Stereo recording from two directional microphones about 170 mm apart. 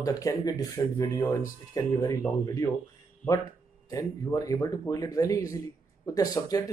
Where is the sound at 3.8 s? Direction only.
20° left (ahead or behind).